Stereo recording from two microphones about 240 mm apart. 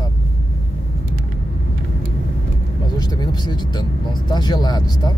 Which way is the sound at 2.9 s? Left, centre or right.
Centre.